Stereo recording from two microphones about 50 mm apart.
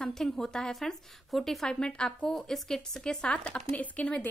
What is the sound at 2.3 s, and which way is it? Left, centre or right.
A woman's voice, centre.